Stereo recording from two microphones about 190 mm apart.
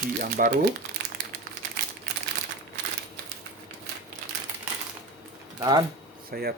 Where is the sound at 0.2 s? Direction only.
45° right (ahead or behind).